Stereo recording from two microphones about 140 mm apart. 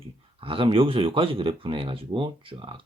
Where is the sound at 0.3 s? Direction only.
40° right (ahead or behind).